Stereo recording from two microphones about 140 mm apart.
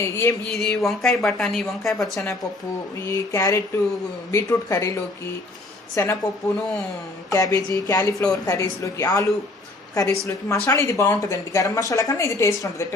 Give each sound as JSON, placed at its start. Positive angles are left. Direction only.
{"t": 0.0, "sound": "a woman's voice", "side_deg": 20}
{"t": 0.4, "sound": "a woman's voice", "side_deg": 0}
{"t": 3.1, "sound": "a woman's voice", "side_deg": 20}
{"t": 7.3, "sound": "a woman's voice", "side_deg": 25}